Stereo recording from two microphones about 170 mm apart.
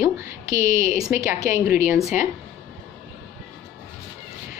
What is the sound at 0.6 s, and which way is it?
Speech, 45° left (ahead or behind).